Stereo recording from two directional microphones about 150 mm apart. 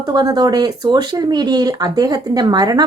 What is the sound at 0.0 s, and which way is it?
Speech, 25° right (ahead or behind).